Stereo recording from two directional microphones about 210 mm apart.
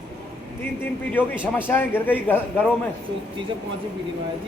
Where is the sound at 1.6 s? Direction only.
10° left (ahead or behind).